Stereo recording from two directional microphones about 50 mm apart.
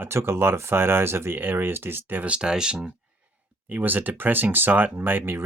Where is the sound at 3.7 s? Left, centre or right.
Right.